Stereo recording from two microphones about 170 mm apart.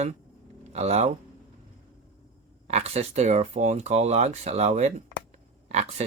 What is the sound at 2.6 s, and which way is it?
Speech, 40° right (ahead or behind).